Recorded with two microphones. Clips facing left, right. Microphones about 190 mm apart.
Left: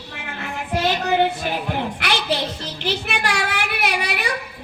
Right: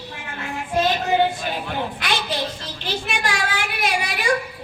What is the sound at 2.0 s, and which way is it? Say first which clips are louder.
Music: left 4 dB; 65° left (ahead or behind).